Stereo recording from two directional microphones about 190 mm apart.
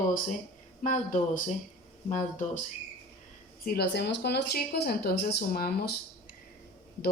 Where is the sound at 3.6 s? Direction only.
60° left (ahead or behind).